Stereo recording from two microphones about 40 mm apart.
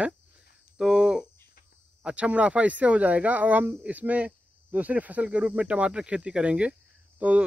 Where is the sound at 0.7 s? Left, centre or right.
Centre.